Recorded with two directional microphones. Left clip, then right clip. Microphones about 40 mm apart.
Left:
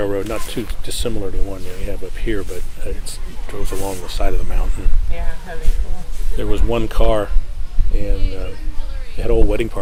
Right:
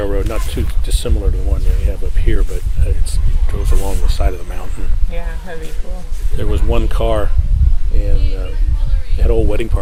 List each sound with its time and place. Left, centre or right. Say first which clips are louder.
0.0 s a sound: even; centre
0.4 s speech: even; centre
4.0 s speech: even; centre
8.2 s speech: even; left
9.1 s speech: even; centre